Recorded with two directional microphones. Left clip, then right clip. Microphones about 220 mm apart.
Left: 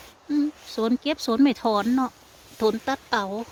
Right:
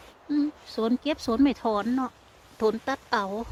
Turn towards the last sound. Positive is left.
turn(degrees=10)  # may be behind; listen again after turning